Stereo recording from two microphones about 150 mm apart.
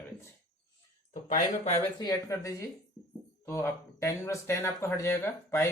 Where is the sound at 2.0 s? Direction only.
25° left (ahead or behind).